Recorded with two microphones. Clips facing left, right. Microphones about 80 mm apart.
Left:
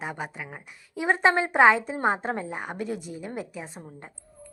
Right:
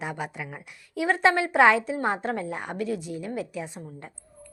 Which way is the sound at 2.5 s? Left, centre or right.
Centre.